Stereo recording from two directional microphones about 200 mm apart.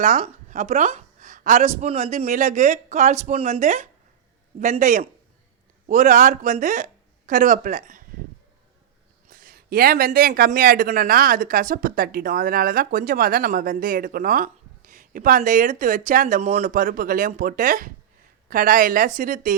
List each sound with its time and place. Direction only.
0.0 s a woman's voice: 35° right (ahead or behind)
9.3 s speech: 45° right (ahead or behind)